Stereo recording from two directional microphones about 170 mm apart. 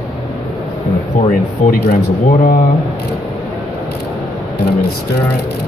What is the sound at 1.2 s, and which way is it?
Speech, 45° left (ahead or behind).